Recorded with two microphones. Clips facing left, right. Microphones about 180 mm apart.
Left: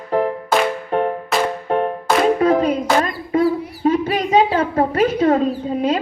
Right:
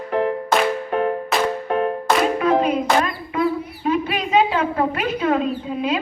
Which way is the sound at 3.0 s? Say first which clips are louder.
Left 4 dB; 40° left (ahead or behind).